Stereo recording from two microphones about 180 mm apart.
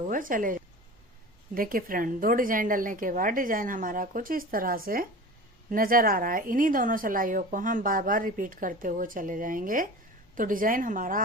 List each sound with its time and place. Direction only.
0.0 s speech: 50° right (ahead or behind)